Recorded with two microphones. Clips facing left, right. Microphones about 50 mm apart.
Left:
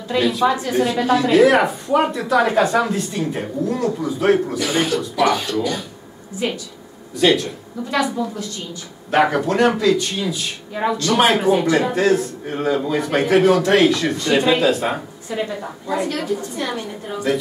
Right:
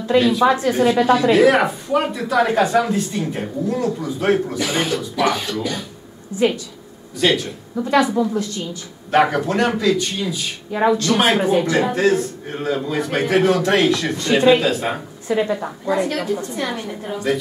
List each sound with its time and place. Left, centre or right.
0.2 s speech: centre
7.2 s speech: centre
9.1 s speech: centre